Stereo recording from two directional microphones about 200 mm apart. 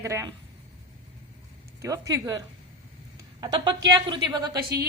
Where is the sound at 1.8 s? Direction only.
15° right (ahead or behind).